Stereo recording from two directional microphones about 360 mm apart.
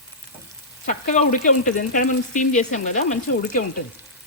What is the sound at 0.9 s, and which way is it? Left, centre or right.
Speech, centre.